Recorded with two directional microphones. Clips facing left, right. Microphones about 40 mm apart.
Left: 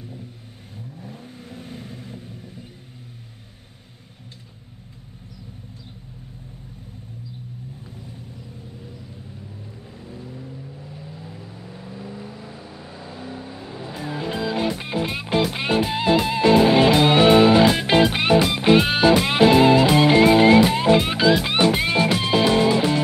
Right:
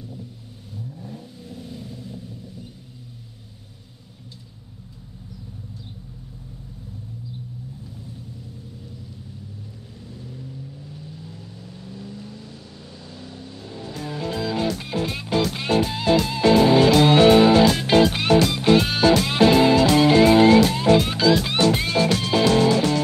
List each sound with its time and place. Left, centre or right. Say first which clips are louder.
0.9 s vehicle: right 1 dB; left
1.4 s vehicle: left 1 dB; left
10.0 s vehicle: left 2 dB; left
17.6 s music: even; centre